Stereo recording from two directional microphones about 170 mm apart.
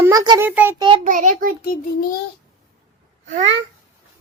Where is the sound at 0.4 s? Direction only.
10° right (ahead or behind).